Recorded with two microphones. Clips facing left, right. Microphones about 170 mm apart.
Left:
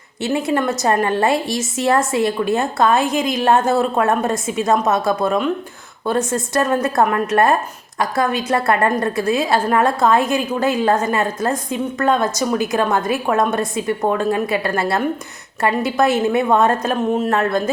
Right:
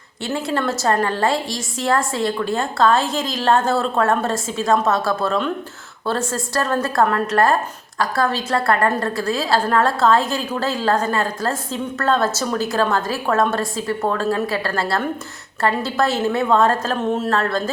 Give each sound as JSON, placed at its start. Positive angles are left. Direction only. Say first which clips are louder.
{"t": 0.2, "sound": "a woman's voice", "louder": "left 4 dB", "side_deg": 20}